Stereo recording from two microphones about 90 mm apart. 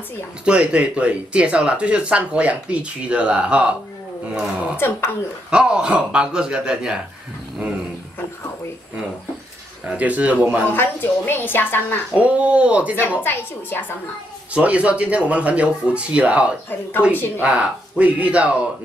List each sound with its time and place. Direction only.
0.5 s speech: 10° right (ahead or behind)
4.7 s a woman's voice: 25° left (ahead or behind)
5.5 s speech: 10° right (ahead or behind)
9.8 s speech: 15° right (ahead or behind)
10.7 s a woman's voice: 25° left (ahead or behind)
12.2 s speech: 15° right (ahead or behind)
13.2 s a woman's voice: 25° left (ahead or behind)
14.5 s speech: 15° right (ahead or behind)